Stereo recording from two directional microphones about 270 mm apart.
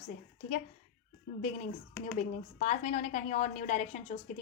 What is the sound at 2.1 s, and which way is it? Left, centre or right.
A woman's voice, left.